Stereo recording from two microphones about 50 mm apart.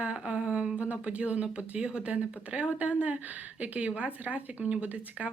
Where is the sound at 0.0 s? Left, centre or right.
Right.